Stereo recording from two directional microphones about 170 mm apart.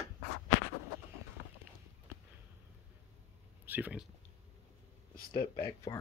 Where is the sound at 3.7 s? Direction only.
10° right (ahead or behind).